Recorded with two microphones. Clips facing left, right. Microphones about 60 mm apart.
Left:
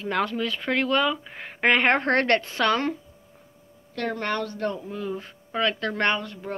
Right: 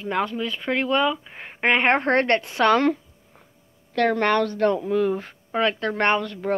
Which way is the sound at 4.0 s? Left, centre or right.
Right.